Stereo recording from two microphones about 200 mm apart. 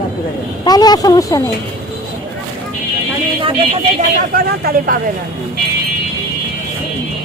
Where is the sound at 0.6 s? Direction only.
20° left (ahead or behind).